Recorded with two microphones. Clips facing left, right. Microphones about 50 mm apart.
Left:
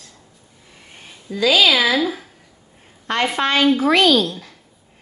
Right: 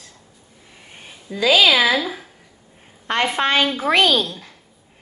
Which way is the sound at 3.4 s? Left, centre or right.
Right.